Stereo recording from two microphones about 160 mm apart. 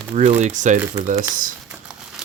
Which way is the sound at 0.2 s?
45° right (ahead or behind).